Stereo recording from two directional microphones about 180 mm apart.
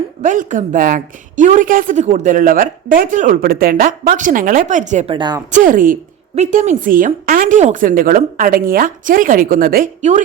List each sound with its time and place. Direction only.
0.3 s a woman's voice: 45° right (ahead or behind)
5.1 s a woman's voice: 25° right (ahead or behind)
5.5 s a woman's voice: 45° right (ahead or behind)